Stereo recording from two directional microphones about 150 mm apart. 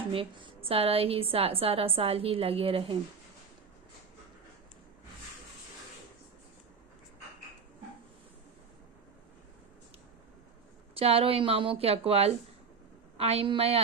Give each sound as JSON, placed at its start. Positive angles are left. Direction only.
{"t": 0.1, "sound": "a woman's voice", "side_deg": -35}
{"t": 10.9, "sound": "a woman's voice", "side_deg": -40}